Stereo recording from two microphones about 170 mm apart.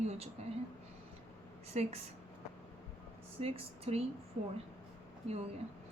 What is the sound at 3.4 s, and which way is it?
Speech, 35° right (ahead or behind).